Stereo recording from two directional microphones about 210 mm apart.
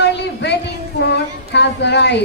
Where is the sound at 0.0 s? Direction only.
55° left (ahead or behind).